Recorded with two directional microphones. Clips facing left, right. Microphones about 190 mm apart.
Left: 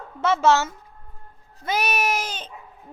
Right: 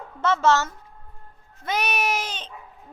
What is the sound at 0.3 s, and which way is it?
A woman's voice, 10° left (ahead or behind).